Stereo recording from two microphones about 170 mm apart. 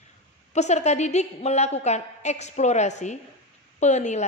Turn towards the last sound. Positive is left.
turn(degrees=45)  # may be behind; listen again after turning